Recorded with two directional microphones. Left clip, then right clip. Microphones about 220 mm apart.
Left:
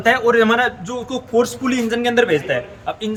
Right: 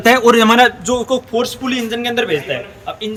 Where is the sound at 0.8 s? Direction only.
20° right (ahead or behind).